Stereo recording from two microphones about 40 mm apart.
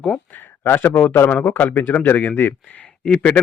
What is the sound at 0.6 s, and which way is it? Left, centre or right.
Speech, left.